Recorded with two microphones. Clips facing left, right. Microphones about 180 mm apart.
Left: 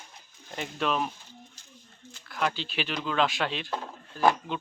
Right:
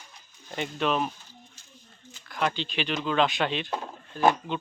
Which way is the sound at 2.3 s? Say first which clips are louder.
Right 2 dB; 5° left (ahead or behind).